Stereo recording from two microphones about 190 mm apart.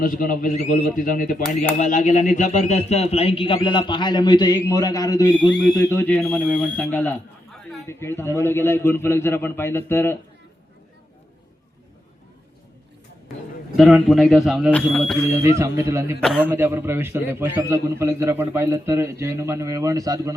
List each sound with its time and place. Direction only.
0.0 s speech: 45° left (ahead or behind); by 5.5 s 20° left (ahead or behind)
5.9 s a man's voice: 10° left (ahead or behind)
13.7 s a man's voice: centre (ahead or behind)
15.4 s a man's voice: 15° right (ahead or behind)